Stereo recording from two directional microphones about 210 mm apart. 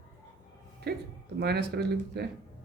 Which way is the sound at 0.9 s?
50° right (ahead or behind).